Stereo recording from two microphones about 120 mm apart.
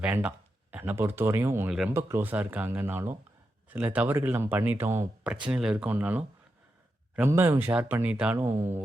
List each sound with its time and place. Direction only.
0.0 s speech: 10° right (ahead or behind)
5.5 s speech: 5° right (ahead or behind)